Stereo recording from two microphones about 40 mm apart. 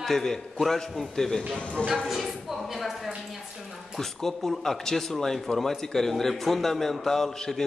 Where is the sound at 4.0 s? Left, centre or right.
Centre.